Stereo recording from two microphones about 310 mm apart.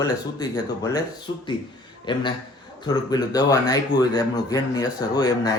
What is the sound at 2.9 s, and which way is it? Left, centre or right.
A man's voice, centre.